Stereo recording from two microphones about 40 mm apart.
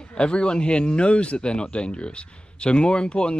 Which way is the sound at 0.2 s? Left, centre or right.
Left.